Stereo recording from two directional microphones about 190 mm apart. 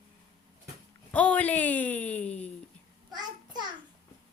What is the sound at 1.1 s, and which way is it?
A woman's voice, 5° left (ahead or behind).